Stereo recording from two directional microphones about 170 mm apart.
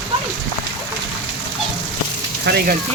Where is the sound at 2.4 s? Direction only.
70° right (ahead or behind).